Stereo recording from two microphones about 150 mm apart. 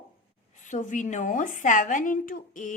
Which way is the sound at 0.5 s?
55° left (ahead or behind).